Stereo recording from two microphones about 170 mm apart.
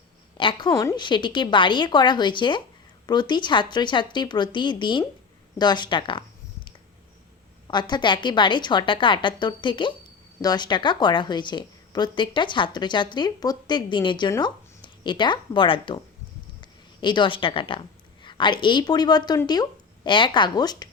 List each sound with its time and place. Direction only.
0.3 s a woman's voice: 30° left (ahead or behind)
7.7 s a woman's voice: 25° left (ahead or behind)